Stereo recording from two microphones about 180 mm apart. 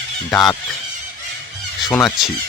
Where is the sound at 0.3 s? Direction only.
Centre (ahead or behind).